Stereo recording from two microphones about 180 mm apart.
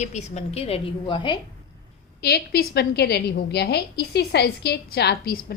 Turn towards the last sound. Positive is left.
turn(degrees=60)  # may be behind; listen again after turning